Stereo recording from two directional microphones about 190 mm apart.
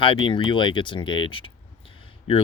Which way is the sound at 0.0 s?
25° left (ahead or behind).